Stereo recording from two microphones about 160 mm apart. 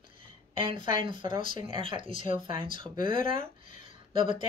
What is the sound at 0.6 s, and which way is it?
Speech, 35° right (ahead or behind).